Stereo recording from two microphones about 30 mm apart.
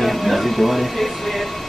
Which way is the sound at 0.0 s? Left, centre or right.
Centre.